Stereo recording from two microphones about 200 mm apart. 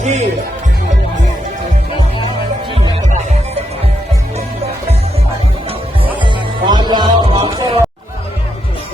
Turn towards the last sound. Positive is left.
turn(degrees=-20)  # may be behind; listen again after turning